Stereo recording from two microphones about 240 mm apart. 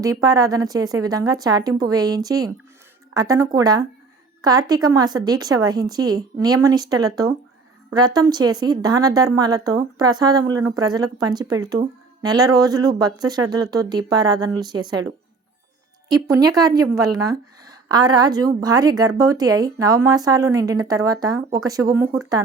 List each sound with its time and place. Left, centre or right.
0.0 s a woman's voice: centre